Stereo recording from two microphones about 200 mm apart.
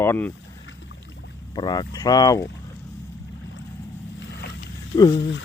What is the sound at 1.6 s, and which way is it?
Speech, 20° left (ahead or behind).